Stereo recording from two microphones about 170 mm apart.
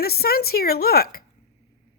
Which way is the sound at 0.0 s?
65° left (ahead or behind).